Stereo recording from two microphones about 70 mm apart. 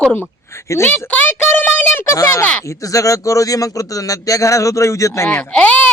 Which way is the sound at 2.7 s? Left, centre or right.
Left.